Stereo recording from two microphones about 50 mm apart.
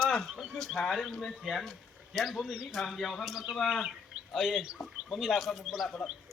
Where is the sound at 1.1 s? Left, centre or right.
Centre.